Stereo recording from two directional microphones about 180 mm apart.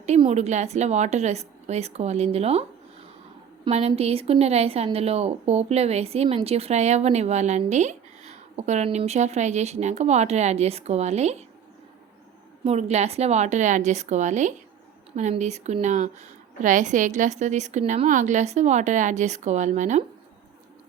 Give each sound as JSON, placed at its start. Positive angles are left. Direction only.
{"t": 0.0, "sound": "a woman's voice", "side_deg": -35}
{"t": 3.7, "sound": "a woman's voice", "side_deg": -35}
{"t": 12.6, "sound": "a woman's voice", "side_deg": -35}